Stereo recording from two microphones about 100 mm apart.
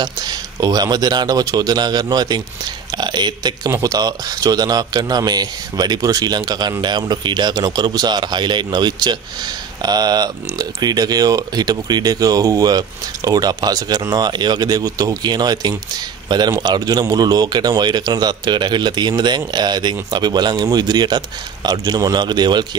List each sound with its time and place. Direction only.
0.0 s a man's voice: 45° right (ahead or behind)